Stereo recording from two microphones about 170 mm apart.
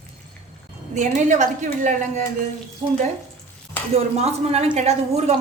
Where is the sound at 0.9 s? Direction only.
45° right (ahead or behind).